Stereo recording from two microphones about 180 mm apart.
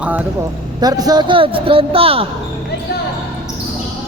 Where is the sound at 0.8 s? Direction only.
20° right (ahead or behind).